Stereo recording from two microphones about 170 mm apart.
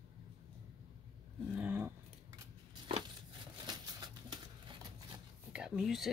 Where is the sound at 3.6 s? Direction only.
25° right (ahead or behind).